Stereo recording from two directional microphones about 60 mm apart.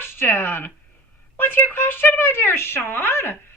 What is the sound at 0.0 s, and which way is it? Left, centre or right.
A woman's voice, left.